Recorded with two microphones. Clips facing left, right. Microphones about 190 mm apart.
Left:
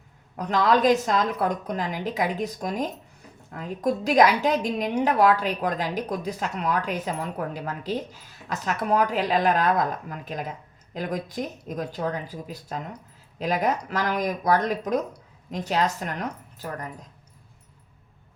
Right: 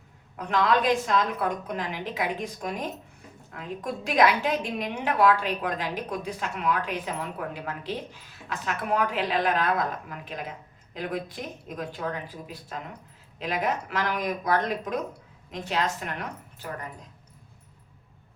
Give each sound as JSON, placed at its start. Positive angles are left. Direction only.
{"t": 0.3, "sound": "a woman's voice", "side_deg": 40}